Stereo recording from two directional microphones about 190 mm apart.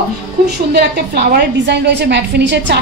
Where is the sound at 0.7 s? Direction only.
55° right (ahead or behind).